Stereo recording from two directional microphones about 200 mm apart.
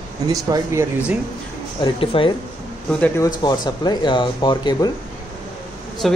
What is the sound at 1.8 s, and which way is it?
Speech, 25° left (ahead or behind).